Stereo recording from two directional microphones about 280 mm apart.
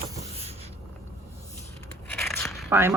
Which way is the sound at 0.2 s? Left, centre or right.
Right.